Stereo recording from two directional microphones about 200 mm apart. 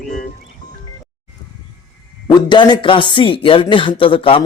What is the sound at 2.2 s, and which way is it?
Speech, 25° left (ahead or behind).